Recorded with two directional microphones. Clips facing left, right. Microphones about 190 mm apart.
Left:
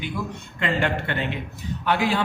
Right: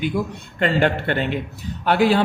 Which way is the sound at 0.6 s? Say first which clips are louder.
Right 5 dB; 35° right (ahead or behind).